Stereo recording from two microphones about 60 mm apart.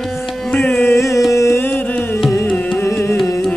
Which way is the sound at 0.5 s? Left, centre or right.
Left.